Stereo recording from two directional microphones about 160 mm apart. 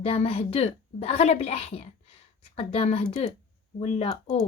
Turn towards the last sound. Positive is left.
turn(degrees=40)  # may be behind; listen again after turning